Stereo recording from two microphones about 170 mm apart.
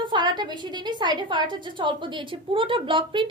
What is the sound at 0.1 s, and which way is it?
A woman's voice, 25° right (ahead or behind).